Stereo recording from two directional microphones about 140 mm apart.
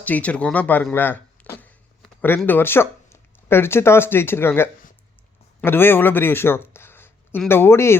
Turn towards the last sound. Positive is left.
turn(degrees=20)  # may be behind; listen again after turning